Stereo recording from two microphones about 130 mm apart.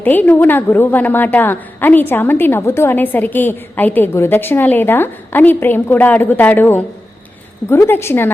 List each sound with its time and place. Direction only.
0.0 s a woman's voice: 15° left (ahead or behind)